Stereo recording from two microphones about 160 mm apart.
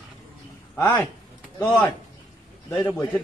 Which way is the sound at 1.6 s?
Centre (ahead or behind).